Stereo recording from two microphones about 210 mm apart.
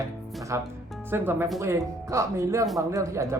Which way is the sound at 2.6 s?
Centre (ahead or behind).